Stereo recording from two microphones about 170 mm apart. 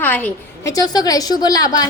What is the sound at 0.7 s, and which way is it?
A woman's voice, 20° left (ahead or behind).